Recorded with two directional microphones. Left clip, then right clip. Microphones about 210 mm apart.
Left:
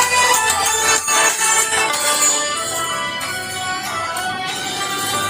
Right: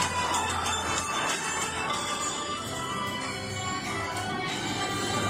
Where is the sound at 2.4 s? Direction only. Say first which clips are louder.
Left 12 dB; 55° left (ahead or behind).